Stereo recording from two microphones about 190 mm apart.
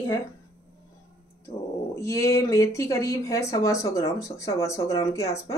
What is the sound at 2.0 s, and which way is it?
Speech, 15° left (ahead or behind).